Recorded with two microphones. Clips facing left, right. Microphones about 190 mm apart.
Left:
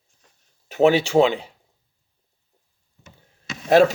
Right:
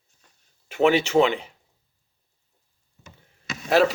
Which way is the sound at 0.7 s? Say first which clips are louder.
Left 3 dB; 40° left (ahead or behind).